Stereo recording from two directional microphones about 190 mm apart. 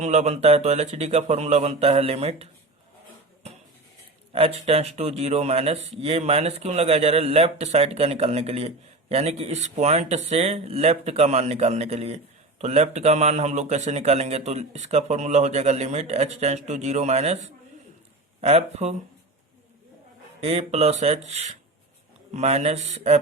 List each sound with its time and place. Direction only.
0.0 s speech: 35° right (ahead or behind)
4.3 s speech: 30° right (ahead or behind)
20.4 s speech: 35° right (ahead or behind)